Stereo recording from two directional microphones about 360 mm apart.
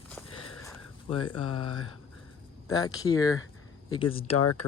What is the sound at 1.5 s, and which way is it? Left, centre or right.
Speech, left.